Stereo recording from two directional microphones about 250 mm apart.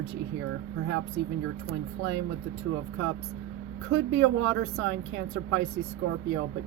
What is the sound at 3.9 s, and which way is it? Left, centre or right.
Speech, right.